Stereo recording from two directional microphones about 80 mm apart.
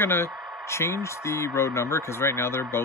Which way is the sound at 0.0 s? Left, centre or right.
Left.